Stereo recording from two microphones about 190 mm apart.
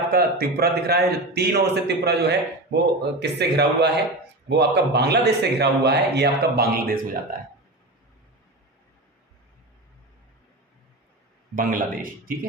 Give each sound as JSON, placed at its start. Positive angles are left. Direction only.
{"t": 0.1, "sound": "a man's voice", "side_deg": -55}
{"t": 11.5, "sound": "speech", "side_deg": -45}